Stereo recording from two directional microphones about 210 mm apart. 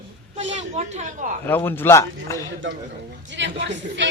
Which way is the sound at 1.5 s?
10° left (ahead or behind).